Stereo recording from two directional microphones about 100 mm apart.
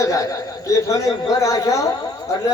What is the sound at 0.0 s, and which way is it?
A man's voice, 35° left (ahead or behind).